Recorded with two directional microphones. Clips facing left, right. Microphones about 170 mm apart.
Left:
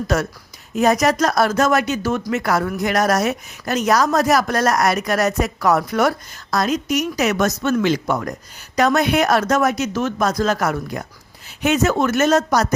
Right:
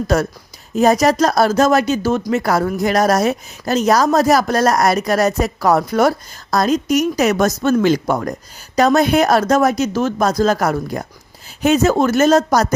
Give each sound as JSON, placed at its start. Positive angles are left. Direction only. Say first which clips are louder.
{"t": 0.1, "sound": "speech", "louder": "right 4 dB", "side_deg": -35}